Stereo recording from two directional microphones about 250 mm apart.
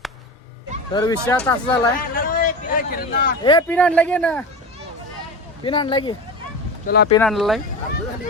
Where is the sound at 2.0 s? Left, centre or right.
Left.